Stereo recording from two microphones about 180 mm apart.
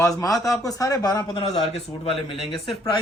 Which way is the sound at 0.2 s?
20° left (ahead or behind).